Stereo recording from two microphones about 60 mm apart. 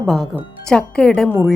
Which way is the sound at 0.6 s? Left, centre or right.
Centre.